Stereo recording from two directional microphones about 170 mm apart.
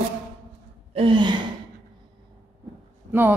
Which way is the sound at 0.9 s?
30° right (ahead or behind).